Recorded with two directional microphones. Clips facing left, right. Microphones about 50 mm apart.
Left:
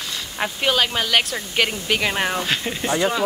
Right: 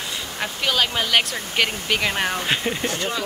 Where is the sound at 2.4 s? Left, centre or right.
Centre.